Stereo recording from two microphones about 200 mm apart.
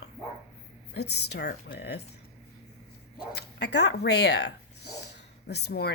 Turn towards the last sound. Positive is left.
turn(degrees=55)  # may be behind; listen again after turning